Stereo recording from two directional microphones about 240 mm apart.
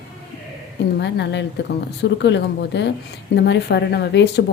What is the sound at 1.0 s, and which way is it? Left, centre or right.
A woman's voice, left.